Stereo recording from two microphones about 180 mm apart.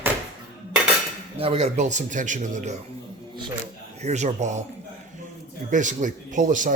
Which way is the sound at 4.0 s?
40° right (ahead or behind).